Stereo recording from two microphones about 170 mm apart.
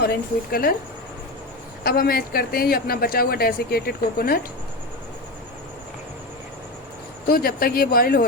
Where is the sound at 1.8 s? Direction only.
60° left (ahead or behind).